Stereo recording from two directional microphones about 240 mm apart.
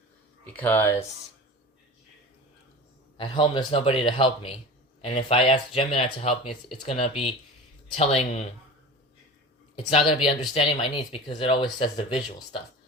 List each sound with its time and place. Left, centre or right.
0.5 s speech: centre
3.2 s speech: left
9.7 s speech: left